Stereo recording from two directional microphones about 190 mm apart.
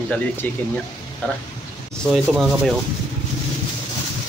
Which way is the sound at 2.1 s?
5° right (ahead or behind).